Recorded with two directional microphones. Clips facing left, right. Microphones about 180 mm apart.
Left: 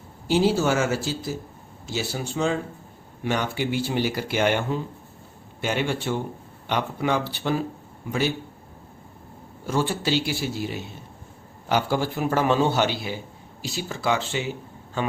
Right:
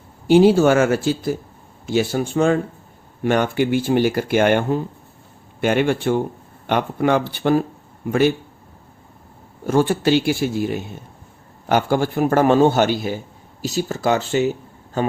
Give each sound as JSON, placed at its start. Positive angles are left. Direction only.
{"t": 0.3, "sound": "a man's voice", "side_deg": -55}
{"t": 9.6, "sound": "a man's voice", "side_deg": -55}